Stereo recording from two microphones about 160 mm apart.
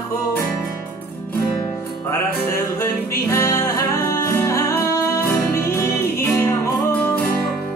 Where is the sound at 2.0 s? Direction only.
15° left (ahead or behind).